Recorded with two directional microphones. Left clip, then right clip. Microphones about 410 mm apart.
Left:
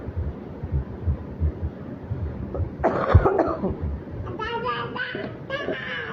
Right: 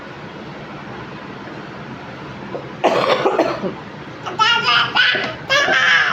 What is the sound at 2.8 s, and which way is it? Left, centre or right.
Cough, centre.